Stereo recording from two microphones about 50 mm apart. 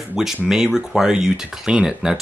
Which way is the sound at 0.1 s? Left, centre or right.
Centre.